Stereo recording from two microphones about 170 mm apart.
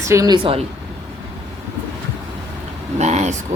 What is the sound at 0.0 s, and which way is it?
Speech, 20° right (ahead or behind).